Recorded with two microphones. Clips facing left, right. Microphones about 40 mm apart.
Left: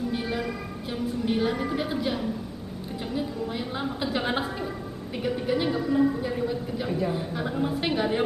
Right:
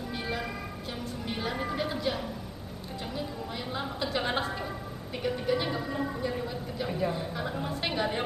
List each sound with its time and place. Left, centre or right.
0.1 s music: centre
3.1 s a woman's voice: centre